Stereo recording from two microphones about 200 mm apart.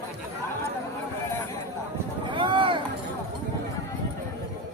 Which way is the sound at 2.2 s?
25° right (ahead or behind).